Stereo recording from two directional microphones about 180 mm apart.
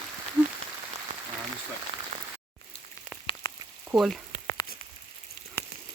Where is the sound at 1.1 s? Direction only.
45° right (ahead or behind).